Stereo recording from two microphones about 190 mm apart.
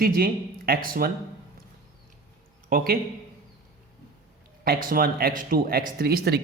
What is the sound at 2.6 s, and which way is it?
Speech, 50° right (ahead or behind).